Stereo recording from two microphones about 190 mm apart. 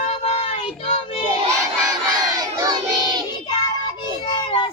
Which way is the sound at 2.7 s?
20° right (ahead or behind).